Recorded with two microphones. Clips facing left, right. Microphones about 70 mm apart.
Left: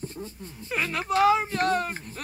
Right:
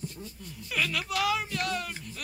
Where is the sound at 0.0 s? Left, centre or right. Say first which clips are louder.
Left 4 dB; left.